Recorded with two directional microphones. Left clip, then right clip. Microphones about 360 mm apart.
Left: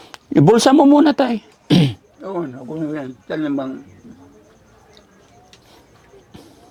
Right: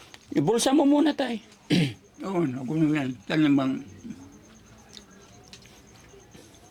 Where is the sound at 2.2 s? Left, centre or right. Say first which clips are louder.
Left 3 dB; right.